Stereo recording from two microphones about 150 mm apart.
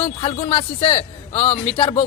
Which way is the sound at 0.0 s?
40° left (ahead or behind).